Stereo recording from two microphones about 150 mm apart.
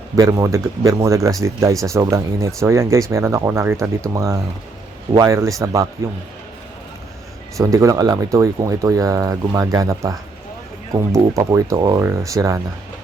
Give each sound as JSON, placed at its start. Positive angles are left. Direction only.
{"t": 0.2, "sound": "speech", "side_deg": -20}
{"t": 7.6, "sound": "speech", "side_deg": -20}
{"t": 11.3, "sound": "speech", "side_deg": -20}